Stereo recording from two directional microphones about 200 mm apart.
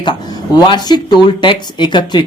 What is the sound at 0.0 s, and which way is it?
Speech, 20° left (ahead or behind).